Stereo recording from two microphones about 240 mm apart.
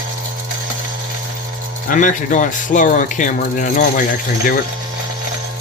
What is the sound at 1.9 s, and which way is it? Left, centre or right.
Speech, left.